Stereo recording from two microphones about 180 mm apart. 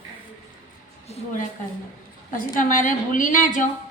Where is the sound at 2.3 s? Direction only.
45° left (ahead or behind).